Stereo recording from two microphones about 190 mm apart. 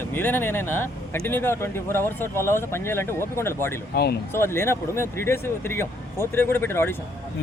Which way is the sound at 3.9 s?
55° left (ahead or behind).